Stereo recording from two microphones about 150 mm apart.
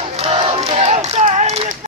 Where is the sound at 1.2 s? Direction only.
45° right (ahead or behind).